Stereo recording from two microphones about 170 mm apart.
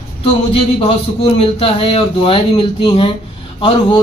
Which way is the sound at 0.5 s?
35° left (ahead or behind).